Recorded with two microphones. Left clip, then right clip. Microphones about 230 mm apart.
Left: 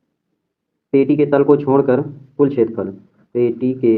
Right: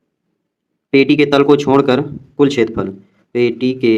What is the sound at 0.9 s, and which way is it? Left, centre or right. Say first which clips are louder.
Speech: right 3 dB; right.